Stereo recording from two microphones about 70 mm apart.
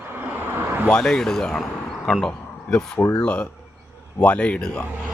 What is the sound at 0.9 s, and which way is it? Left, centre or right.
Speech, centre.